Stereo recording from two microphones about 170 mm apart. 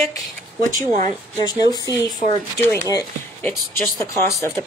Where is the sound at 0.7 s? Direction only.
50° right (ahead or behind).